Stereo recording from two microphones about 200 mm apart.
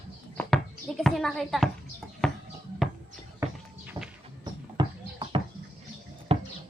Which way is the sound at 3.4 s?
15° right (ahead or behind).